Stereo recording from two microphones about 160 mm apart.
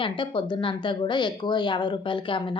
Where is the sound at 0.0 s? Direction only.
30° left (ahead or behind).